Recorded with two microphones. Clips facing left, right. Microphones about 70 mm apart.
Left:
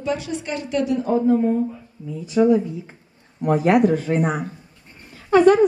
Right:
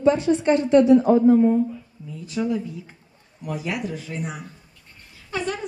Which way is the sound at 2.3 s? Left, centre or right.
Left.